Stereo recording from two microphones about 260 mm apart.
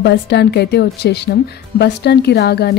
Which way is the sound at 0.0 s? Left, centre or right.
Left.